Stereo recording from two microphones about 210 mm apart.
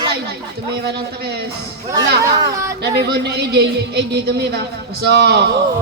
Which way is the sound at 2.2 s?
20° right (ahead or behind).